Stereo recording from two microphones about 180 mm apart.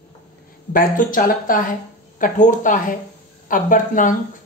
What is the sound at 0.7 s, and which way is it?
Speech, 50° left (ahead or behind).